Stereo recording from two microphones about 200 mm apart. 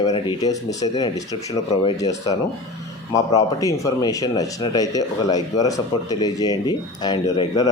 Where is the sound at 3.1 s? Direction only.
15° left (ahead or behind).